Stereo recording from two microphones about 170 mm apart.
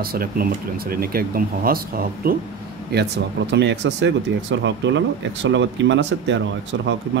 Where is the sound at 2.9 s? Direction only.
75° right (ahead or behind).